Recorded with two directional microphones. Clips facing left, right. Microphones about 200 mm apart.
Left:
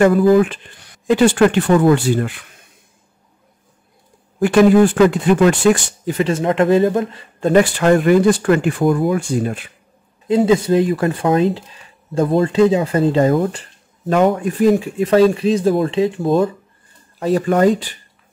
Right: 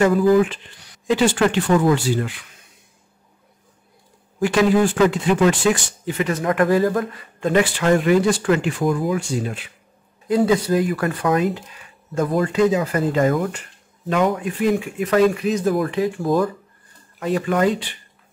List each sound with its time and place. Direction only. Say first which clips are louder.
0.0 s speech: left 3 dB; 60° left (ahead or behind)
4.4 s speech: left 6 dB; 55° left (ahead or behind)
6.0 s speech: left 4 dB; 30° left (ahead or behind)
7.3 s speech: left 5 dB; 40° left (ahead or behind)
10.2 s speech: left 3 dB; 25° left (ahead or behind)
17.2 s speech: left 5 dB; 35° left (ahead or behind)